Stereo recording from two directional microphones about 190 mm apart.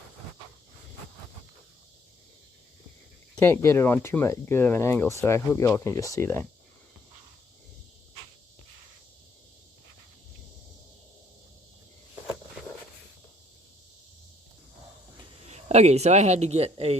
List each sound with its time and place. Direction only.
3.3 s speech: 15° left (ahead or behind)
15.4 s speech: 35° right (ahead or behind)